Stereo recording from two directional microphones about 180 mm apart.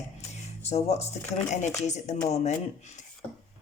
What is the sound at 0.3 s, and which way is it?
Speech, 40° left (ahead or behind).